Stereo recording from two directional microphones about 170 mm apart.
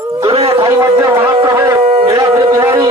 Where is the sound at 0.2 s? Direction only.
30° right (ahead or behind).